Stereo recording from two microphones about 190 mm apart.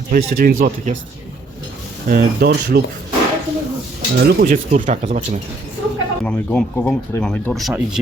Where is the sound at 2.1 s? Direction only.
55° right (ahead or behind).